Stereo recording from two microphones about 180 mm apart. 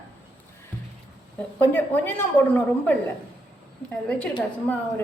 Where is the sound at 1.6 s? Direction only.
10° left (ahead or behind).